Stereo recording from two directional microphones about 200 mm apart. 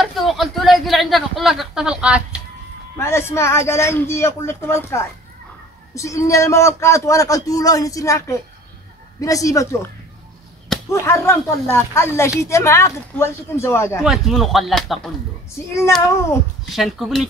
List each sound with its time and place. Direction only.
0.0 s a sound: centre (ahead or behind)
3.0 s a man's voice: 10° left (ahead or behind)
10.9 s a man's voice: 15° left (ahead or behind)
14.0 s speech: centre (ahead or behind)
16.7 s speech: centre (ahead or behind)